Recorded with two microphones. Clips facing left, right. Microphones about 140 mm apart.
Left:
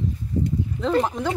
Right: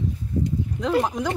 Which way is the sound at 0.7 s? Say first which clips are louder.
Even; 5° right (ahead or behind).